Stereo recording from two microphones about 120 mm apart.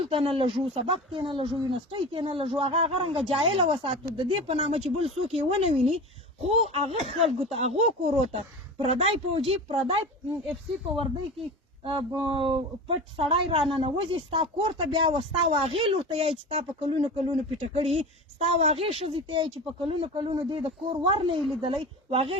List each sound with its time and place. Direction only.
0.0 s speech: 50° right (ahead or behind)
11.8 s speech: 45° right (ahead or behind)